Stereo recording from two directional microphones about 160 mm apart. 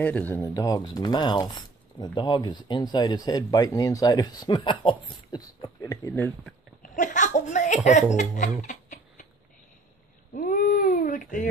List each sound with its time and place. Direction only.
0.0 s speech: 10° left (ahead or behind)
0.4 s speech: 20° left (ahead or behind)
6.8 s speech: 50° left (ahead or behind)
8.2 s chicken: 50° left (ahead or behind)
10.3 s speech: 55° left (ahead or behind)